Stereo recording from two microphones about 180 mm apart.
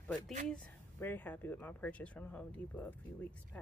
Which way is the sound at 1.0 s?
10° left (ahead or behind).